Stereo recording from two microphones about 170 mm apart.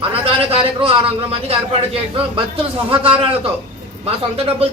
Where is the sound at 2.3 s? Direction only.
30° right (ahead or behind).